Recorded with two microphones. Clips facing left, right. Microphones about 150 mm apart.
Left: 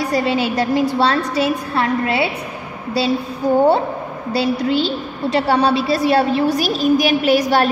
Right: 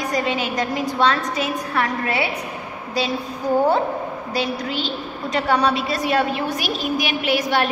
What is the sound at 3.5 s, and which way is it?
A woman's voice, 30° left (ahead or behind).